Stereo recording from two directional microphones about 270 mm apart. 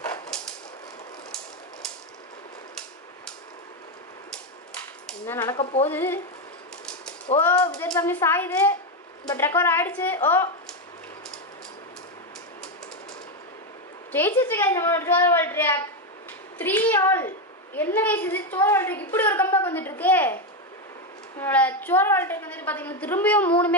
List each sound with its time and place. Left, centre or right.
0.3 s a sound: centre
5.0 s a sound: centre
5.6 s speech: left
5.9 s a woman's voice: centre
7.3 s a woman's voice: centre
14.1 s a woman's voice: centre
21.4 s a woman's voice: centre